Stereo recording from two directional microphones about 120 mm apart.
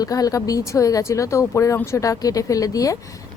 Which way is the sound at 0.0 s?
30° left (ahead or behind).